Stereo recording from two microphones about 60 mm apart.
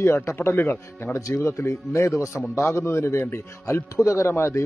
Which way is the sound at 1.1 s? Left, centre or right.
Left.